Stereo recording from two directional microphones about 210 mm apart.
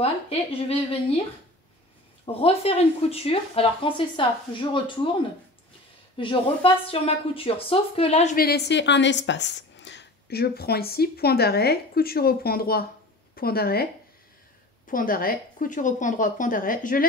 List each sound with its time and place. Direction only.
0.0 s speech: 30° left (ahead or behind)
2.2 s speech: 30° left (ahead or behind)
6.1 s speech: 25° left (ahead or behind)
8.5 s a woman's voice: 50° left (ahead or behind)
14.9 s speech: 40° left (ahead or behind)